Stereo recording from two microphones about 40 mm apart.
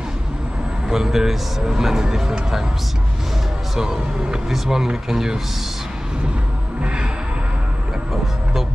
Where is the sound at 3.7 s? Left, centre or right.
Centre.